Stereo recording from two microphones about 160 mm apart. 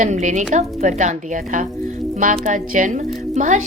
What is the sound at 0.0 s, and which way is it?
A woman's voice, 50° right (ahead or behind).